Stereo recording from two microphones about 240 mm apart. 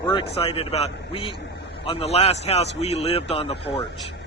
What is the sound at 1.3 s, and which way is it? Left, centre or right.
Vehicle, left.